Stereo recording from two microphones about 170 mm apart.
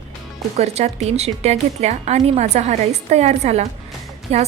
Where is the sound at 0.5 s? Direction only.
40° right (ahead or behind).